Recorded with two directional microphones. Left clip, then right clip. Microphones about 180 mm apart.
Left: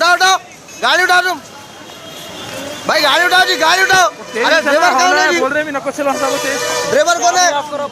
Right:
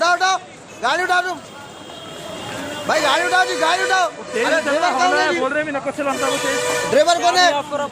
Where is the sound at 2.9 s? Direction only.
45° left (ahead or behind).